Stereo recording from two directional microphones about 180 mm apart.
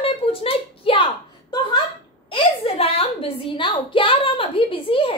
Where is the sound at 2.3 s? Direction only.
30° left (ahead or behind).